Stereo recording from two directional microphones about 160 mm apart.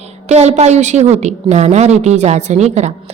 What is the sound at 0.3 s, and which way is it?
A woman's voice, 45° right (ahead or behind).